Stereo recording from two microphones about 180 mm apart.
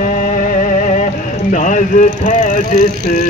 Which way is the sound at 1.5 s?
45° left (ahead or behind).